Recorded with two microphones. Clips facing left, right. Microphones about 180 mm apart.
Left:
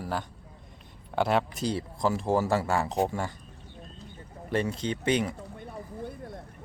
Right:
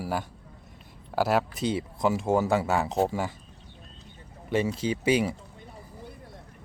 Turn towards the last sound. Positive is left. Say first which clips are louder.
# right 3 dB
turn(degrees=-5)  # may be behind; listen again after turning